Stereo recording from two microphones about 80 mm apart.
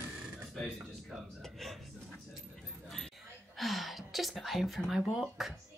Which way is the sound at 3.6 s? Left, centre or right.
Centre.